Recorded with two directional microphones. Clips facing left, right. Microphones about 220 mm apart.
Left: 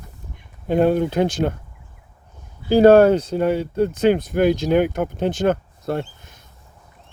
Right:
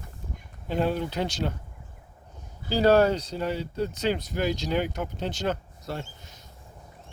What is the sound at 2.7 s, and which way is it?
Speech, 55° left (ahead or behind).